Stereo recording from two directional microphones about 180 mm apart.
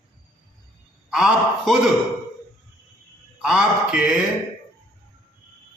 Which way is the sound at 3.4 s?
5° right (ahead or behind).